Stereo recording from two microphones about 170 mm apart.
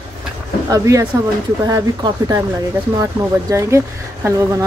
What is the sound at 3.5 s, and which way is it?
Speech, 15° right (ahead or behind).